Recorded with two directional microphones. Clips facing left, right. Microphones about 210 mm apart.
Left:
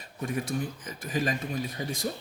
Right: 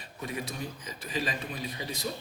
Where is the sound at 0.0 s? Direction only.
45° left (ahead or behind).